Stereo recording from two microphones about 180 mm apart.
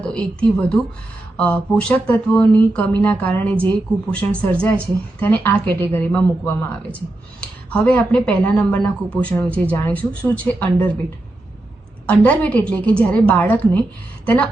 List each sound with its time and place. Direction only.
0.0 s a woman's voice: 5° left (ahead or behind)
12.0 s speech: 10° left (ahead or behind)